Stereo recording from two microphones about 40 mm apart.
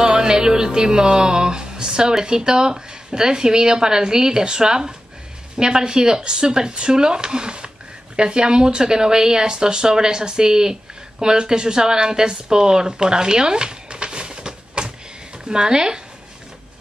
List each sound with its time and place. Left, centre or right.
0.0 s music: centre
8.2 s speech: right
15.4 s music: centre